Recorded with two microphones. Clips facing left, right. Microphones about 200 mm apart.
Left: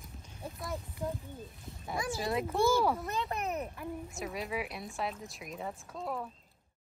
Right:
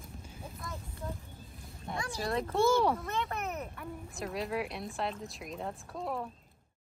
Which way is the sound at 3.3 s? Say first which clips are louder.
Left 2 dB; 30° left (ahead or behind).